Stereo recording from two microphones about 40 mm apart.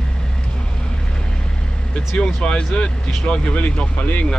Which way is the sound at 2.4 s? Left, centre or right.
Left.